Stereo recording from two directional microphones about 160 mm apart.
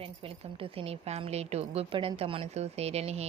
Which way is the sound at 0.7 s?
40° right (ahead or behind).